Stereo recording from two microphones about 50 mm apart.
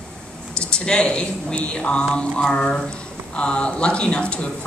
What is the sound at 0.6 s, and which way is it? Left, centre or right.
A woman's voice, centre.